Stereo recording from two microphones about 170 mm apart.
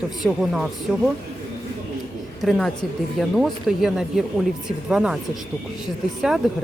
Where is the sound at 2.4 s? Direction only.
Centre (ahead or behind).